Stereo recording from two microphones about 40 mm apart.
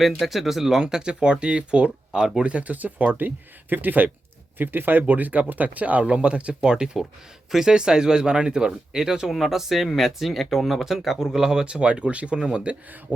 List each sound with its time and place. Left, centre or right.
0.0 s speech: centre
11.6 s speech: right
13.1 s speech: right